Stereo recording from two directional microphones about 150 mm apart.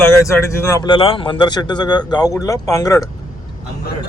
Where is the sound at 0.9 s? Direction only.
35° left (ahead or behind).